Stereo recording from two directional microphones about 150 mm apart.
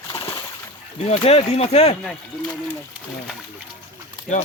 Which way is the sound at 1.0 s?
45° left (ahead or behind).